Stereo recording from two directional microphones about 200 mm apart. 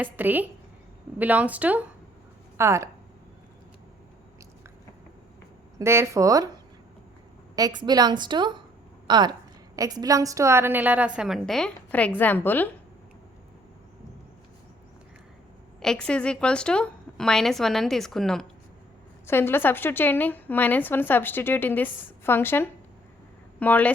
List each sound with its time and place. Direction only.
0.0 s speech: 10° right (ahead or behind)
5.8 s speech: 15° right (ahead or behind)
7.5 s a woman's voice: 20° right (ahead or behind); by 12.6 s 10° left (ahead or behind)
15.8 s a woman's voice: 5° left (ahead or behind)